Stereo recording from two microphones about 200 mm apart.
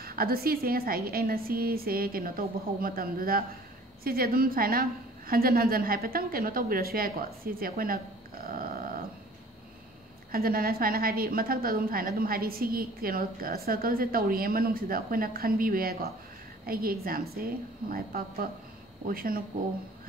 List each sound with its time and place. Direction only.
0.0 s a woman's voice: 50° right (ahead or behind)
8.5 s dog: 45° right (ahead or behind)
10.3 s a woman's voice: 50° right (ahead or behind)